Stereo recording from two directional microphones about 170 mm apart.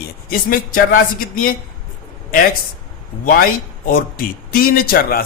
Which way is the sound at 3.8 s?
60° left (ahead or behind).